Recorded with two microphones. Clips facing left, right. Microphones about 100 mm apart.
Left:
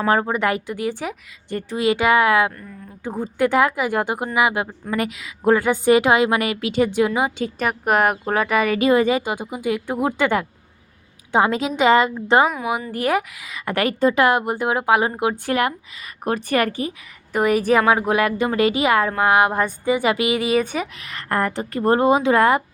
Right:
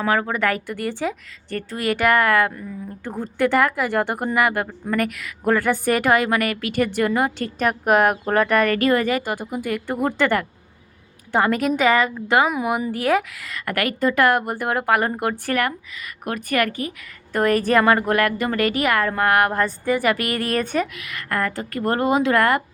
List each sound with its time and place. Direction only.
0.1 s a woman's voice: 25° left (ahead or behind)
12.5 s a woman's voice: 5° right (ahead or behind); by 13.7 s 15° left (ahead or behind)
13.7 s a woman's voice: 30° left (ahead or behind); by 15.5 s 10° left (ahead or behind)
15.9 s a woman's voice: 30° left (ahead or behind)
17.3 s a woman's voice: 10° left (ahead or behind)
20.8 s a woman's voice: 30° left (ahead or behind)